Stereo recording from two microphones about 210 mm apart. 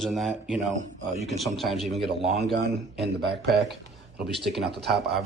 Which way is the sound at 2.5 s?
50° right (ahead or behind).